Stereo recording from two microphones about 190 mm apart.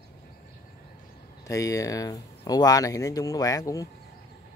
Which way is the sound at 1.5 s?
15° left (ahead or behind).